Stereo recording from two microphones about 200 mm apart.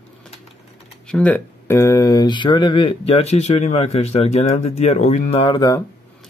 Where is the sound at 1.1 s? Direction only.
5° left (ahead or behind).